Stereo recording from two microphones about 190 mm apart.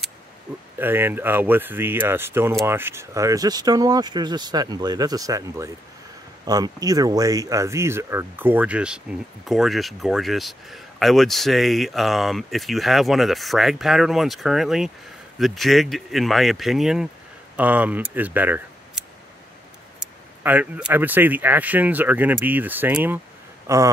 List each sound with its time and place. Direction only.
0.7 s speech: 10° right (ahead or behind)